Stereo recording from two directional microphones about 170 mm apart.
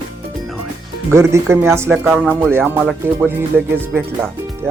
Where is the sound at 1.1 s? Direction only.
15° right (ahead or behind).